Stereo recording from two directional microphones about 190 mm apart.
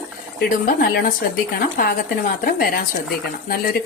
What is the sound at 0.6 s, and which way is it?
Speech, 50° left (ahead or behind).